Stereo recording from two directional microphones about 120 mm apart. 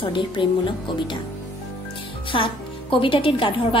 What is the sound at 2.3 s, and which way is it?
A woman's voice, 45° left (ahead or behind).